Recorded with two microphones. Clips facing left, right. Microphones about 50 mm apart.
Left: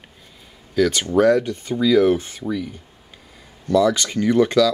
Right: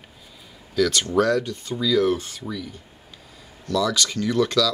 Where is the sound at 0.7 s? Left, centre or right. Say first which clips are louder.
Left 3 dB; centre.